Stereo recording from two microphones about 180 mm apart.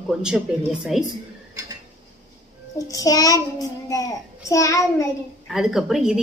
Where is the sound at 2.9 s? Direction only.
20° left (ahead or behind).